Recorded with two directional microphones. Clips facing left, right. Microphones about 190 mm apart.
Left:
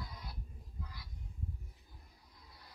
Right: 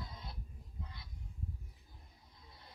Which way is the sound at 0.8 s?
25° right (ahead or behind).